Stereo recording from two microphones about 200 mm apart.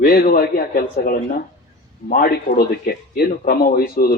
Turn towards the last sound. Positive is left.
turn(degrees=50)  # may be behind; listen again after turning